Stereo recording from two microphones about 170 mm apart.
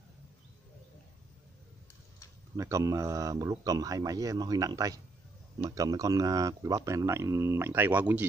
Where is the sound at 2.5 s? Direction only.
20° right (ahead or behind).